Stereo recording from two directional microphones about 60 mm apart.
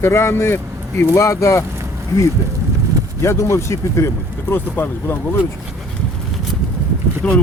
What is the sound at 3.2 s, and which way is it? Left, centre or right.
Speech, left.